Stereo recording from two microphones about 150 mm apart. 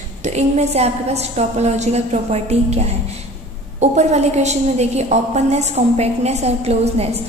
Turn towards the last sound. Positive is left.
turn(degrees=-45)  # may be behind; listen again after turning